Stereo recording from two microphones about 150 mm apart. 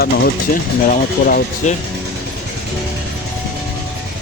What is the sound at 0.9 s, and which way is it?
Speech, 65° left (ahead or behind).